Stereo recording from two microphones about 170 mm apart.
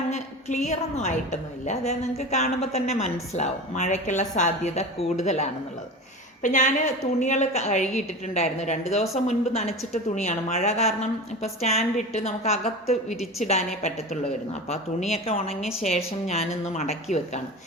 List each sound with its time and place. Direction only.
0.1 s a woman's voice: 40° left (ahead or behind)
15.1 s a woman's voice: 35° left (ahead or behind)